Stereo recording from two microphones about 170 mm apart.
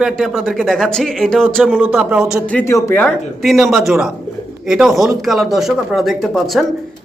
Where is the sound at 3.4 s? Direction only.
Centre (ahead or behind).